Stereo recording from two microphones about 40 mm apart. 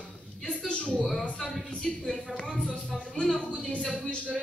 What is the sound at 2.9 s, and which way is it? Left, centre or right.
Music, centre.